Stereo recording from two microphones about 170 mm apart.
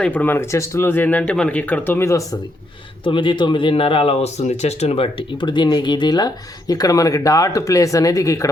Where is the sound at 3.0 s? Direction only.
30° left (ahead or behind).